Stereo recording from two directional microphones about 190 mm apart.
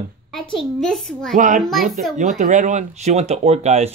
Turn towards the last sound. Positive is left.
turn(degrees=-35)  # may be behind; listen again after turning